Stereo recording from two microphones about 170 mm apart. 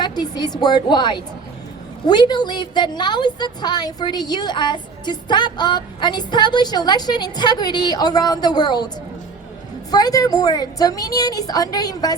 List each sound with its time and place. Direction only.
0.0 s a woman's voice: 25° left (ahead or behind)
9.9 s a woman's voice: 20° left (ahead or behind)